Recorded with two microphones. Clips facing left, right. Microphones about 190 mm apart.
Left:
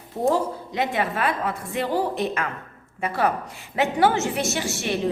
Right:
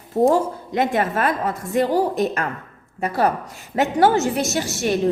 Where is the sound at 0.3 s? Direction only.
50° right (ahead or behind).